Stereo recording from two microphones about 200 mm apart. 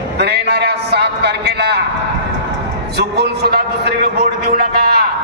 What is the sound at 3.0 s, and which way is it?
A man's voice, 55° right (ahead or behind).